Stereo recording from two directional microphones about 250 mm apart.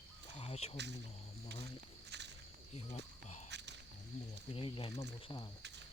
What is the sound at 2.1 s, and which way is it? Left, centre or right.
Snake, right.